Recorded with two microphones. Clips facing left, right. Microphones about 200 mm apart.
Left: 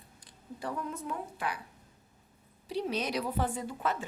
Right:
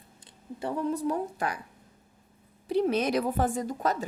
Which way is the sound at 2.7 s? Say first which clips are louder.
Right 8 dB; 50° right (ahead or behind).